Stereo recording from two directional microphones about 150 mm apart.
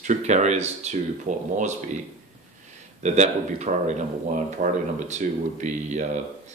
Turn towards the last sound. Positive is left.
turn(degrees=-55)  # may be behind; listen again after turning